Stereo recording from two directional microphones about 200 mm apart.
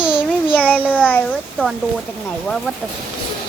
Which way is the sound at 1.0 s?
5° left (ahead or behind).